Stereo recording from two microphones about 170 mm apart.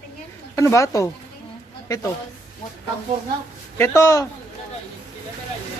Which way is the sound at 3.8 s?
15° left (ahead or behind).